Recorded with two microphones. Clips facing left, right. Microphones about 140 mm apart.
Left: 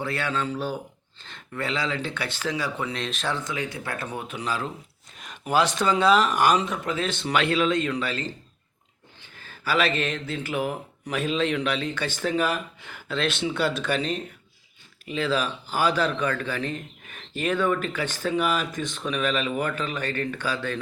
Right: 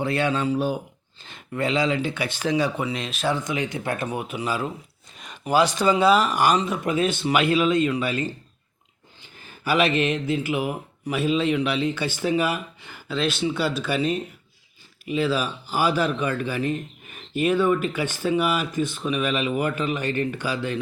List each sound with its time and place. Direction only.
0.0 s a man's voice: 20° right (ahead or behind)
2.8 s a man's voice: 5° right (ahead or behind)
6.8 s a man's voice: 15° right (ahead or behind)
9.6 s a man's voice: 15° right (ahead or behind)